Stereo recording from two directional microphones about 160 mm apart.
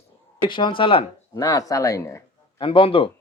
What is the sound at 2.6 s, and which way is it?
Speech, 35° left (ahead or behind).